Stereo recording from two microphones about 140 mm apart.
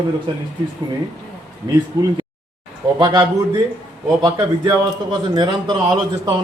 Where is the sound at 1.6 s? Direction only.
25° right (ahead or behind).